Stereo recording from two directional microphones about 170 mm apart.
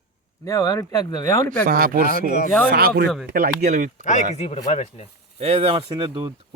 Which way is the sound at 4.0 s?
45° left (ahead or behind).